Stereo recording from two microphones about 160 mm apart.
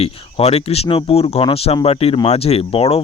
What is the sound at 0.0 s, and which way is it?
Speech, 40° left (ahead or behind).